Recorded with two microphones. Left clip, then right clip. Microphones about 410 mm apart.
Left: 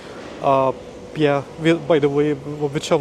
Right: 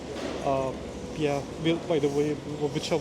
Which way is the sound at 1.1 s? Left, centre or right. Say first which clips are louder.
Left 10 dB; left.